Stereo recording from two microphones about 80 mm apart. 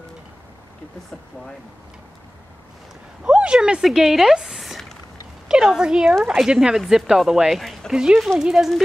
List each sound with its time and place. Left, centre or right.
3.3 s a woman's voice: centre
7.9 s a woman's voice: centre